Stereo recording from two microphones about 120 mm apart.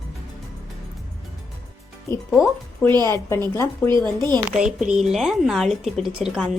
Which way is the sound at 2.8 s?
10° left (ahead or behind).